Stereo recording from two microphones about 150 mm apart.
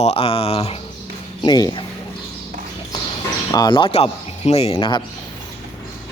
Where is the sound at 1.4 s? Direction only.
25° left (ahead or behind).